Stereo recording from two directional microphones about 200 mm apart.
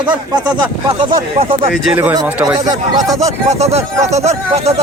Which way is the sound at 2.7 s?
20° right (ahead or behind).